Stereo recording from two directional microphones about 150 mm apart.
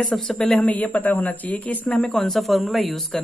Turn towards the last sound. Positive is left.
turn(degrees=0)  # may be behind; listen again after turning